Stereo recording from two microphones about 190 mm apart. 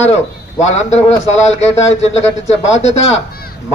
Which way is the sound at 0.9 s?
35° left (ahead or behind).